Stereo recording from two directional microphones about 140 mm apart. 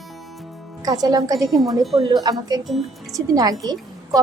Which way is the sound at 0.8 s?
30° right (ahead or behind).